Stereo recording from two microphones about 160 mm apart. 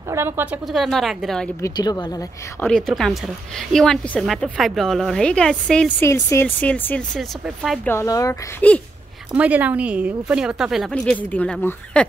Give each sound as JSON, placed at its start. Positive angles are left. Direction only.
{"t": 0.1, "sound": "a woman's voice", "side_deg": -15}
{"t": 0.7, "sound": "a woman's voice", "side_deg": 0}
{"t": 1.6, "sound": "speech", "side_deg": 25}
{"t": 2.6, "sound": "a woman's voice", "side_deg": 5}
{"t": 7.2, "sound": "a woman's voice", "side_deg": 0}
{"t": 7.8, "sound": "speech", "side_deg": 15}
{"t": 9.3, "sound": "a woman's voice", "side_deg": -10}